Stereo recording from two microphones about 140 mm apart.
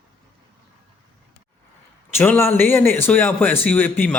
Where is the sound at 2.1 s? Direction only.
15° left (ahead or behind).